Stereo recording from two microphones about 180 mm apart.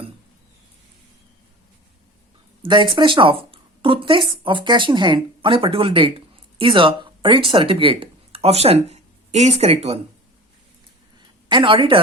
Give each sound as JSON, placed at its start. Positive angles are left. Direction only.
{"t": 2.9, "sound": "speech", "side_deg": -25}
{"t": 11.4, "sound": "a woman's voice", "side_deg": -25}